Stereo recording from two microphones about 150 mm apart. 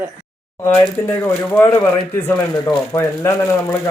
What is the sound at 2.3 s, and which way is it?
Speech, 15° left (ahead or behind).